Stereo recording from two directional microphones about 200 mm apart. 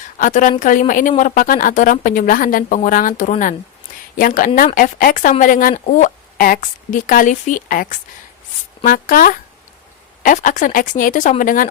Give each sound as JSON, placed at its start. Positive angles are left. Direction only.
{"t": 0.2, "sound": "speech", "side_deg": 40}